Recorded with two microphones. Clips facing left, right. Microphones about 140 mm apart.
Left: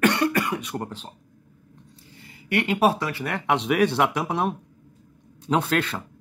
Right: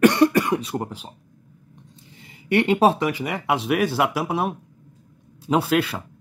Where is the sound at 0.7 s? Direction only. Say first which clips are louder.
Right 3 dB; 15° right (ahead or behind).